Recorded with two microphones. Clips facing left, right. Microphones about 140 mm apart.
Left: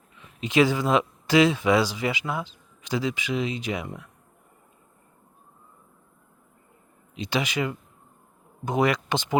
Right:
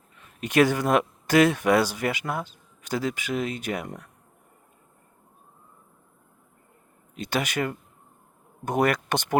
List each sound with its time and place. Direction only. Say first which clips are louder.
0.3 s speech: even; 60° right (ahead or behind)
7.2 s speech: even; 55° right (ahead or behind)